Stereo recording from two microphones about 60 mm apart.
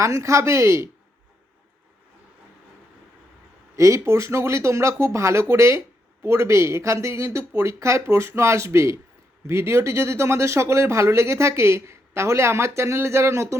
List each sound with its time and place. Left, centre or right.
0.0 s speech: right
3.8 s speech: right